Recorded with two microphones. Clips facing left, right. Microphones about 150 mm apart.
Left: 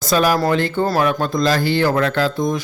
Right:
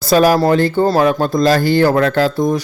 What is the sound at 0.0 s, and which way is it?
Speech, 35° right (ahead or behind).